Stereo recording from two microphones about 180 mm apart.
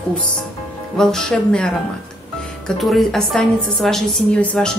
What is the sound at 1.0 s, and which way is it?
A woman's voice, centre (ahead or behind).